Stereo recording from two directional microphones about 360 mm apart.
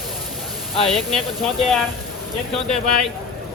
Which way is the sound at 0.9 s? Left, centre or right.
Centre.